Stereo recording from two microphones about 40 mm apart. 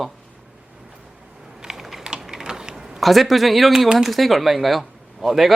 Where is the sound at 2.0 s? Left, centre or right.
Centre.